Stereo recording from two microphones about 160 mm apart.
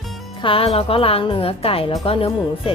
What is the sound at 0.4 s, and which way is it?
A woman's voice, 35° left (ahead or behind).